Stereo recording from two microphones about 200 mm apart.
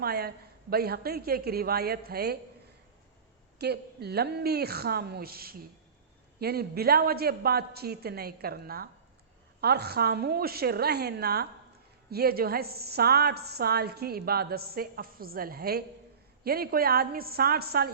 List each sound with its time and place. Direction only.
0.0 s a woman's voice: 50° right (ahead or behind)
3.6 s a woman's voice: 55° right (ahead or behind)